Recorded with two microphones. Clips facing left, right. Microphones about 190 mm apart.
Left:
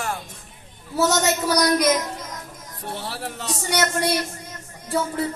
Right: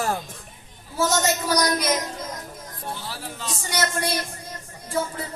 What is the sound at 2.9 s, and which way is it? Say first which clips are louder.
A woman's voice: left 4 dB; 65° left (ahead or behind).